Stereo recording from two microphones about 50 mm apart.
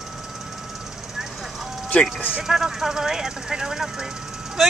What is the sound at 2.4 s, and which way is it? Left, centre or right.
Speech, centre.